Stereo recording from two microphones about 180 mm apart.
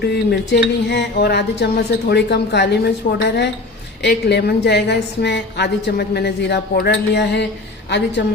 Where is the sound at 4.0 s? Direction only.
70° left (ahead or behind).